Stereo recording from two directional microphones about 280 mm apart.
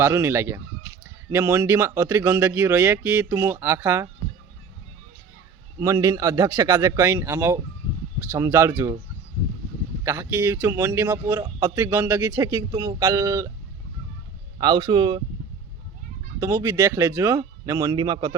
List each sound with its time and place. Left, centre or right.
0.0 s speech: centre
5.8 s speech: centre
10.0 s speech: centre
14.6 s speech: centre
16.4 s speech: centre